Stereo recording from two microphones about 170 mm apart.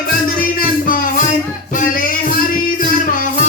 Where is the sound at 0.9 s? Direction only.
55° left (ahead or behind).